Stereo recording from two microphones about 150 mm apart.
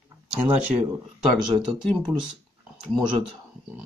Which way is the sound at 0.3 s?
10° right (ahead or behind).